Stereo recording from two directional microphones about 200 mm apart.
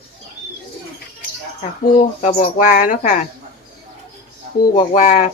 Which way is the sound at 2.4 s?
40° left (ahead or behind).